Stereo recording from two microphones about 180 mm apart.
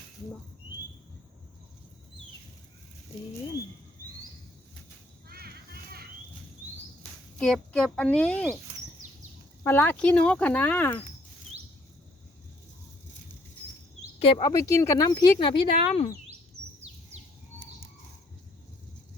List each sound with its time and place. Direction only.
5.3 s a sound: 60° right (ahead or behind)
7.3 s speech: 5° left (ahead or behind)
9.6 s speech: 10° left (ahead or behind)
14.4 s speech: 15° left (ahead or behind)